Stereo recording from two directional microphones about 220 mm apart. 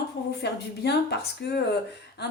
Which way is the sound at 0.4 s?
50° left (ahead or behind).